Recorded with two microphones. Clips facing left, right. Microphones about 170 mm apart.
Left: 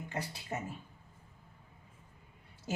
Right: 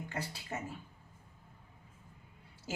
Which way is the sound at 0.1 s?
20° left (ahead or behind).